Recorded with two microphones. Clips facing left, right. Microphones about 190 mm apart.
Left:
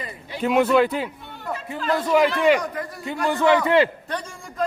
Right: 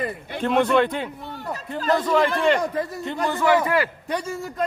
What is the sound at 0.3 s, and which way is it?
A man's voice, 5° left (ahead or behind).